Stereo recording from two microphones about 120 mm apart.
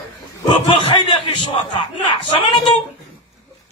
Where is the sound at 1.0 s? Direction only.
45° left (ahead or behind).